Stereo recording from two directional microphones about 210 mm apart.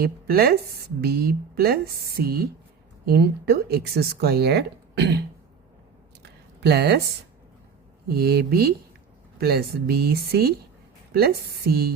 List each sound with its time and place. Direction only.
0.0 s speech: 45° right (ahead or behind)
6.6 s speech: 50° right (ahead or behind)
8.0 s speech: 45° right (ahead or behind)